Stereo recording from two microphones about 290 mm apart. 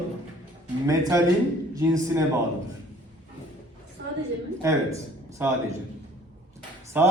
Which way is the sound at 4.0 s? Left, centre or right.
Right.